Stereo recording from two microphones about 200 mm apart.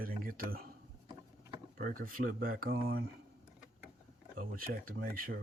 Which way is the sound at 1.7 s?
45° right (ahead or behind).